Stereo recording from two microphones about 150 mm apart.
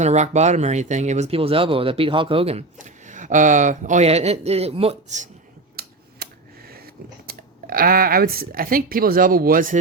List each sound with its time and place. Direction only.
0.0 s speech: 50° right (ahead or behind)
2.7 s speech: 55° right (ahead or behind); by 5.2 s 40° right (ahead or behind)
5.8 s scissors: 90° right
6.2 s a sound: 90° right
7.3 s speech: 80° right